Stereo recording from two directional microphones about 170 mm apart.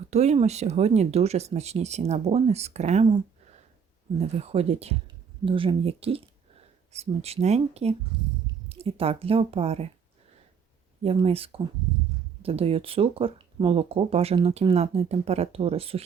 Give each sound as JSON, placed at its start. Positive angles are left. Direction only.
{"t": 0.1, "sound": "speech", "side_deg": -40}
{"t": 4.2, "sound": "speech", "side_deg": -35}
{"t": 11.0, "sound": "speech", "side_deg": -35}